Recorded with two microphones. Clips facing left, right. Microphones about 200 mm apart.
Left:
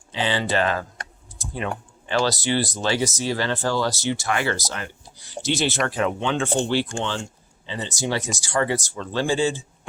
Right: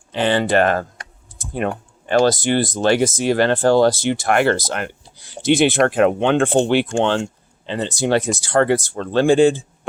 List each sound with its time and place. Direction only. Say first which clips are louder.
0.1 s speech: right 7 dB; 55° right (ahead or behind)